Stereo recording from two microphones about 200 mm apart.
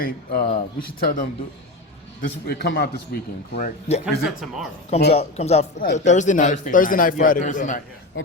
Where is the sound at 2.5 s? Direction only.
55° left (ahead or behind).